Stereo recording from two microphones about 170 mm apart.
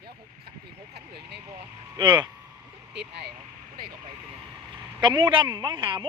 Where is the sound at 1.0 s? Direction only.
75° right (ahead or behind).